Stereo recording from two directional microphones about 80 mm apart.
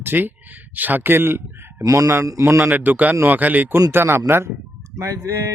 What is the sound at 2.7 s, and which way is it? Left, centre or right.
Speech, right.